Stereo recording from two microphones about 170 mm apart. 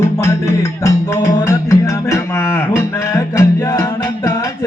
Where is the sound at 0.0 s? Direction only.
15° left (ahead or behind).